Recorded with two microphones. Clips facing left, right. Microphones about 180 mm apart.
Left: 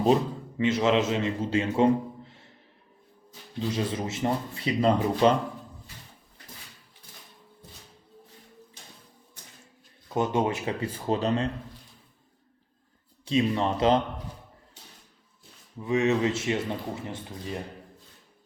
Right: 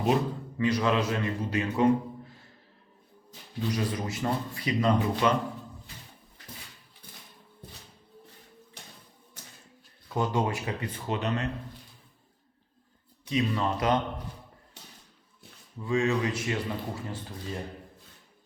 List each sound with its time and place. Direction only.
0.6 s speech: 25° left (ahead or behind)
3.6 s speech: 25° left (ahead or behind)
8.8 s a sound: 65° right (ahead or behind)
10.2 s speech: 20° left (ahead or behind)
13.2 s speech: 25° left (ahead or behind)
15.8 s speech: 20° left (ahead or behind)